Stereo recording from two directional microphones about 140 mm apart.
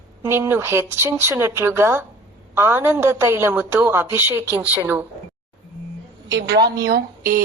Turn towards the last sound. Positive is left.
turn(degrees=-25)  # may be behind; listen again after turning